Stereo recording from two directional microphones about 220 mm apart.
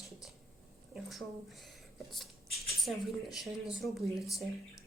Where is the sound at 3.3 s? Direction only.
Centre (ahead or behind).